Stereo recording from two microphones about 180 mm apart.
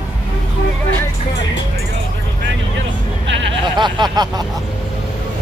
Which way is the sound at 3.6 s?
25° right (ahead or behind).